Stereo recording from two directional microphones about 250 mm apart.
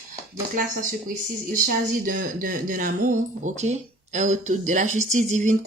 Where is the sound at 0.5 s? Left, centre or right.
Right.